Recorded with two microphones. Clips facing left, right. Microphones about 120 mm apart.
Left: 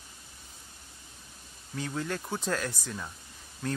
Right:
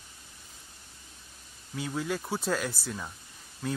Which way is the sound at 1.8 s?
5° right (ahead or behind).